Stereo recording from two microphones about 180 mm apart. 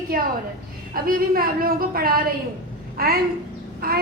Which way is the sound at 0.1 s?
55° right (ahead or behind).